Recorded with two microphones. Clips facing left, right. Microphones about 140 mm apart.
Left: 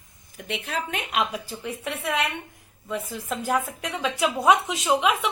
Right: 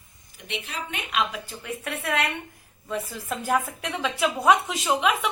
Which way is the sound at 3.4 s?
15° left (ahead or behind).